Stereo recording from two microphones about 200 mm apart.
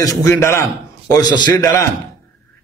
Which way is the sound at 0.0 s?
15° left (ahead or behind).